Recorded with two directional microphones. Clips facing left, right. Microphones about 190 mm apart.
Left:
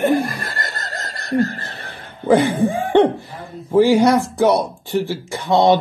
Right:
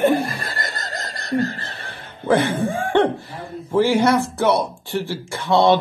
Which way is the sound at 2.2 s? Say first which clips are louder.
Left 4 dB; 15° left (ahead or behind).